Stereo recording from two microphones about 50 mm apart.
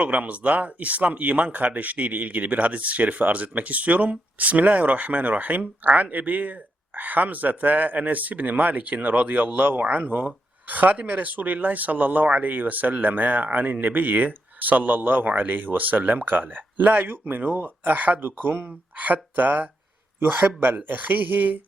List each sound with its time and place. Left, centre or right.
0.0 s a man's voice: right